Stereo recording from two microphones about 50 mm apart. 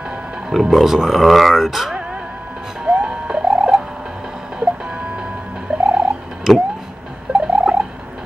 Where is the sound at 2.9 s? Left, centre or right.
Centre.